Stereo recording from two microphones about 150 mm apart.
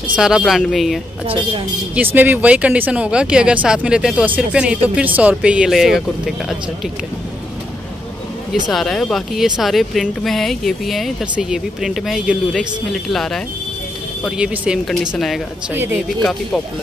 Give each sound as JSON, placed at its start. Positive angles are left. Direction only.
{"t": 0.1, "sound": "speech", "side_deg": -5}
{"t": 1.2, "sound": "a woman's voice", "side_deg": -35}
{"t": 2.0, "sound": "speech", "side_deg": -10}
{"t": 8.6, "sound": "speech", "side_deg": 0}